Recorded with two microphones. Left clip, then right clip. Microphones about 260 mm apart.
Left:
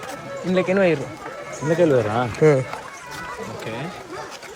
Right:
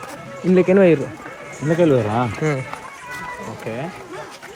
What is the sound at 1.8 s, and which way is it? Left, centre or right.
Speech, right.